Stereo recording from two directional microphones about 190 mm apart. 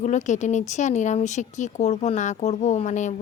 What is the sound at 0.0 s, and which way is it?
Speech, 40° left (ahead or behind).